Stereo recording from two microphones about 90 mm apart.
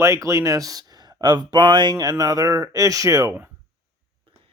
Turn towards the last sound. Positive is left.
turn(degrees=-40)  # may be behind; listen again after turning